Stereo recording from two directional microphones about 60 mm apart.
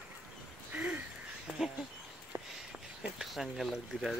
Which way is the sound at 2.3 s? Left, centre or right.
Right.